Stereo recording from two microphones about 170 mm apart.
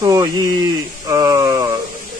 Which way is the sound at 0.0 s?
20° right (ahead or behind).